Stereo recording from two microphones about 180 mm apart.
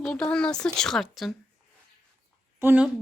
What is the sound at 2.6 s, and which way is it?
Speech, 10° right (ahead or behind).